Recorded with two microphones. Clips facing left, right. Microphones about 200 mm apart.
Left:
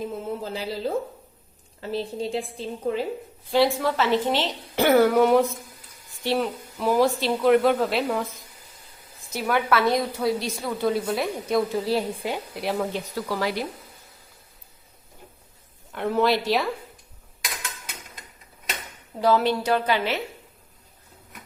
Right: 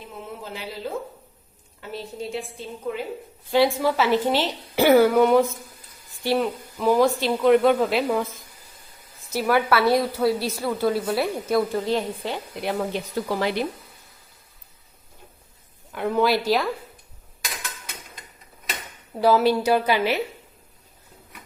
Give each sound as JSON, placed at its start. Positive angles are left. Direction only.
{"t": 0.0, "sound": "a woman's voice", "side_deg": 35}
{"t": 3.5, "sound": "a woman's voice", "side_deg": 0}
{"t": 12.9, "sound": "speech", "side_deg": -20}
{"t": 15.9, "sound": "a woman's voice", "side_deg": 0}
{"t": 19.2, "sound": "a woman's voice", "side_deg": -10}